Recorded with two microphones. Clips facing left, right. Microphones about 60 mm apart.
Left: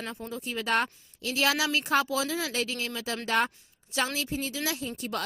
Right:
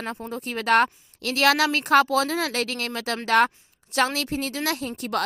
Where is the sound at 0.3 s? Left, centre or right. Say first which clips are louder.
Right 7 dB; right.